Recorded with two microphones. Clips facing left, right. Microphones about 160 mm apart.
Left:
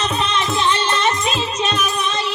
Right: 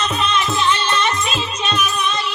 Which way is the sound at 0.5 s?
25° left (ahead or behind).